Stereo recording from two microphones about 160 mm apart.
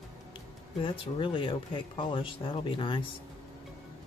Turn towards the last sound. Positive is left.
turn(degrees=30)  # may be behind; listen again after turning